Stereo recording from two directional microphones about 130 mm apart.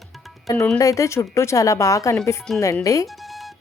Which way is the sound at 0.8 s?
25° left (ahead or behind).